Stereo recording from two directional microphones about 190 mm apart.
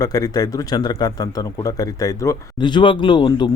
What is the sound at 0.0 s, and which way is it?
A man's voice, 20° left (ahead or behind).